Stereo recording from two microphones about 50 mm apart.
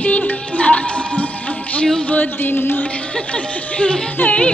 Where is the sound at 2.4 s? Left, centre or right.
Left.